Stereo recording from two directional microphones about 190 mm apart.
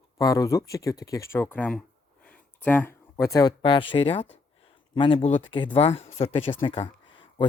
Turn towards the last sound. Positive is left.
turn(degrees=30)  # may be behind; listen again after turning